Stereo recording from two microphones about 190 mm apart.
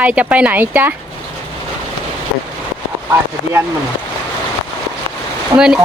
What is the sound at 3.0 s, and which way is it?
Speech, 15° right (ahead or behind).